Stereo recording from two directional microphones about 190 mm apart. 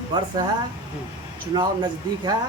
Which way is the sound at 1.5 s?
20° right (ahead or behind).